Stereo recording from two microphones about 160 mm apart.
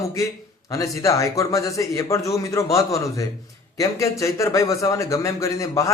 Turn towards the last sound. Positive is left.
turn(degrees=20)  # may be behind; listen again after turning